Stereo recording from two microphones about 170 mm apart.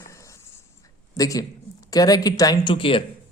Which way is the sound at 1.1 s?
20° left (ahead or behind).